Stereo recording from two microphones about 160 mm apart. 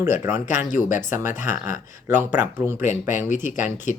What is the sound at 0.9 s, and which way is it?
Speech, 15° right (ahead or behind).